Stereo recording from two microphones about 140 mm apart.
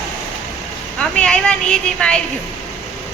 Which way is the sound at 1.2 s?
5° left (ahead or behind).